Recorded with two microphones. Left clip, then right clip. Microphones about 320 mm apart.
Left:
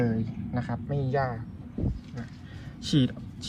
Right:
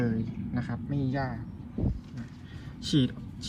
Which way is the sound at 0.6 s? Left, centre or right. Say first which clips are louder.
Left 2 dB; centre.